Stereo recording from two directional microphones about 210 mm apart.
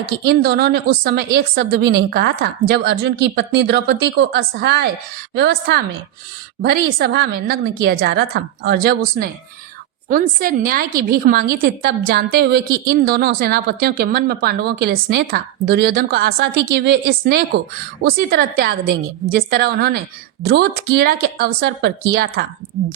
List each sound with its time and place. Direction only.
0.0 s a woman's voice: 50° right (ahead or behind)
6.8 s a woman's voice: 55° right (ahead or behind)